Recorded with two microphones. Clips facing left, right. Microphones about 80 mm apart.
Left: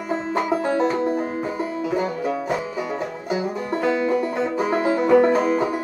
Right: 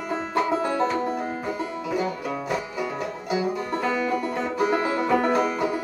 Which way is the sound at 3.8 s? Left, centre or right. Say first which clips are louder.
Left 5 dB; left.